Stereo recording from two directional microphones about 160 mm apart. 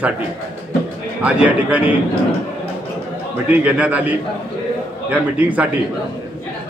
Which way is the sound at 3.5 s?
10° right (ahead or behind).